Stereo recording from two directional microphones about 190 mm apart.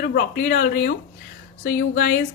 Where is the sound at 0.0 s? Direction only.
50° left (ahead or behind).